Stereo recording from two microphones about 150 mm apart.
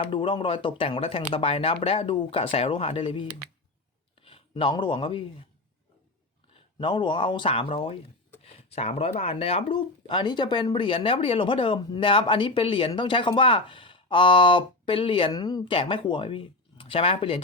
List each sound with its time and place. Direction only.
0.0 s speech: 35° left (ahead or behind)
6.5 s speech: 35° left (ahead or behind)